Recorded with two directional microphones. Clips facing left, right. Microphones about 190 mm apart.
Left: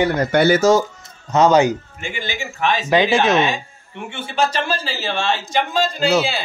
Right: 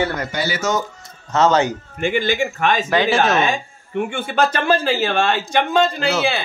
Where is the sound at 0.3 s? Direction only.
60° left (ahead or behind).